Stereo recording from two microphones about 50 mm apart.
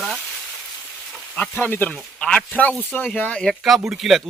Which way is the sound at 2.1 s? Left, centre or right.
Left.